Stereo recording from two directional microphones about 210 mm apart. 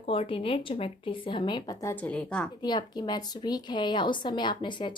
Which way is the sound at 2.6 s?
20° left (ahead or behind).